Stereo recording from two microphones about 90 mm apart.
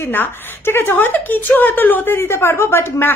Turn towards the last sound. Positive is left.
turn(degrees=25)  # may be behind; listen again after turning